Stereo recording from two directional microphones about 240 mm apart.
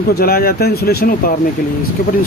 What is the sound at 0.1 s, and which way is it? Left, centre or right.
Speech, left.